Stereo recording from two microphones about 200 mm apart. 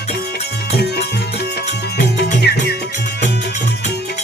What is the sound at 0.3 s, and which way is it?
Music, 55° left (ahead or behind).